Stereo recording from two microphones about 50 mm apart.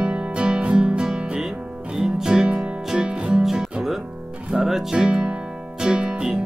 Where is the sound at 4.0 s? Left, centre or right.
Right.